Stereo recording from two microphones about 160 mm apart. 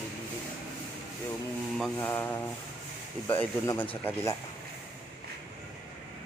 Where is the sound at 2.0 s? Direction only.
15° left (ahead or behind).